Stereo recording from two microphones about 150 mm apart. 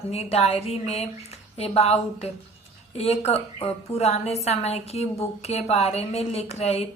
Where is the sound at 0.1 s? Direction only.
45° left (ahead or behind).